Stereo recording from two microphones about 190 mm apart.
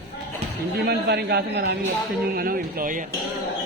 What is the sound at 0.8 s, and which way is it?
A man's voice, 55° right (ahead or behind).